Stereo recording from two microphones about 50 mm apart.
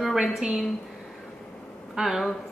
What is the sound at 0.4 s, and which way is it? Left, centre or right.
Speech, centre.